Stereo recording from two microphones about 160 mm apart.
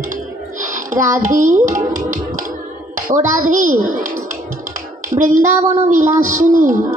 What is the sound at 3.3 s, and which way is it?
Speech, 55° right (ahead or behind).